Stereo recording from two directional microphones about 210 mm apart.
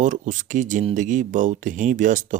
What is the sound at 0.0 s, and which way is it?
Speech, 35° right (ahead or behind).